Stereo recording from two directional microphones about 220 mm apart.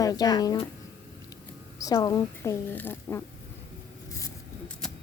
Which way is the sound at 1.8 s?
15° left (ahead or behind).